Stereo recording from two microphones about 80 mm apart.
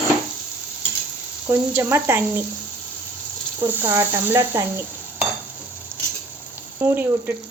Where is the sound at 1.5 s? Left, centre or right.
Right.